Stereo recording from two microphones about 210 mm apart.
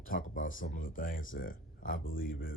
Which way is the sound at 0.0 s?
40° left (ahead or behind).